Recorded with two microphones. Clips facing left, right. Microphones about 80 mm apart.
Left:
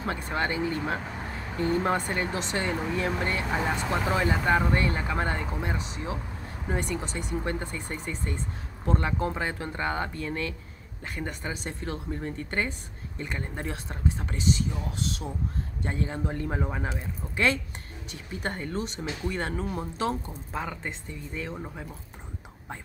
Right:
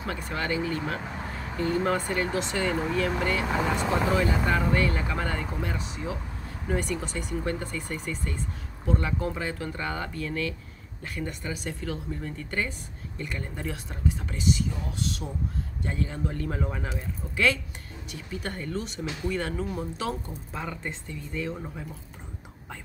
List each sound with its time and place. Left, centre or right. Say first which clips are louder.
0.0 s speech: left 2 dB; left
8.8 s speech: left 1 dB; left
18.1 s speech: left 1 dB; left
20.6 s speech: even; centre